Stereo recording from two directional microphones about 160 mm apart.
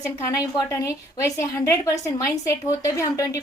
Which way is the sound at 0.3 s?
20° left (ahead or behind).